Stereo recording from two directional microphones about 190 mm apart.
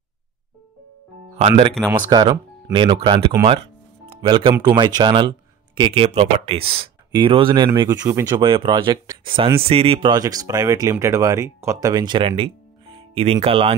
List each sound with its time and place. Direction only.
1.9 s speech: 20° right (ahead or behind)